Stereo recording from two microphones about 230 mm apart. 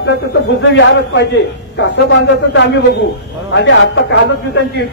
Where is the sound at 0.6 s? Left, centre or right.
Left.